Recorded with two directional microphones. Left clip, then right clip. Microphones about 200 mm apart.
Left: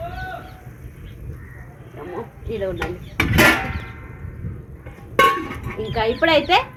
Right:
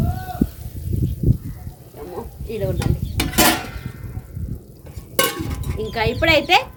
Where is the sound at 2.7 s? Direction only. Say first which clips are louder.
Left 2 dB; 65° right (ahead or behind).